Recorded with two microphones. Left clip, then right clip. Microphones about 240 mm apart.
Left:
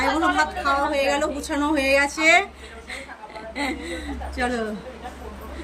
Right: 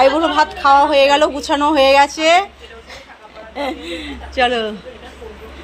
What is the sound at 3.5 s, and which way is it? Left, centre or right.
Speech, centre.